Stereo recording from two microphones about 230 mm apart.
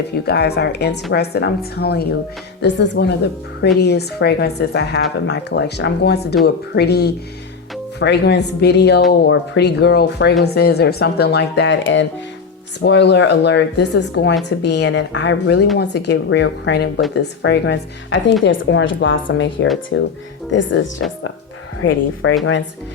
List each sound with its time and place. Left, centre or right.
0.3 s speech: left